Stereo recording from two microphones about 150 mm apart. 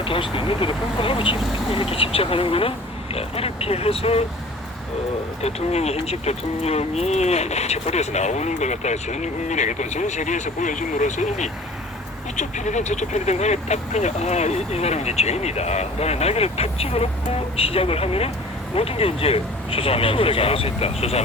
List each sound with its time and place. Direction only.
0.0 s speech: 35° left (ahead or behind)
5.4 s speech: 45° left (ahead or behind)